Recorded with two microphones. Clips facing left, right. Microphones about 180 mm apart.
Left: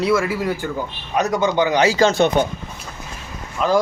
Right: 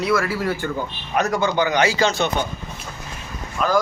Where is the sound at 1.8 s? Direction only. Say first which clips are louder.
Left 4 dB; 45° left (ahead or behind).